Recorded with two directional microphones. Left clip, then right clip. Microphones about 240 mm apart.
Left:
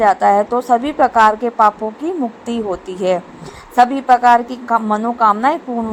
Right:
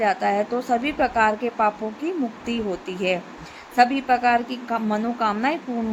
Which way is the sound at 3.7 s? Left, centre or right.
Centre.